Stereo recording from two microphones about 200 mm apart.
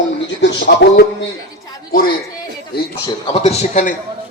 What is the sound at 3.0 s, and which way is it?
Speech, 20° left (ahead or behind).